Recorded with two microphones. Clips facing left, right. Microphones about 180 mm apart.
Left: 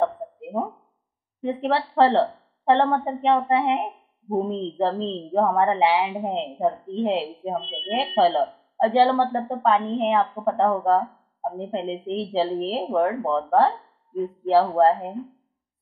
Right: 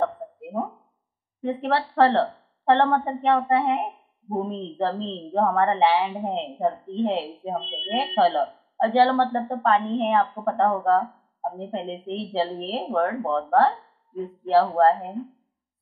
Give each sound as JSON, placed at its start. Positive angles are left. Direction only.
{"t": 1.4, "sound": "a woman's voice", "side_deg": 15}